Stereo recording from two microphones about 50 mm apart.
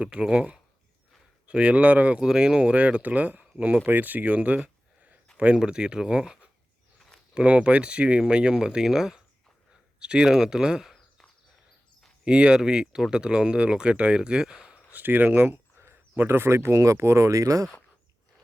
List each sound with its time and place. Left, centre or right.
0.0 s speech: right
2.2 s speech: centre
2.6 s speech: right
5.5 s speech: centre
12.2 s speech: centre
14.8 s speech: right
16.7 s speech: right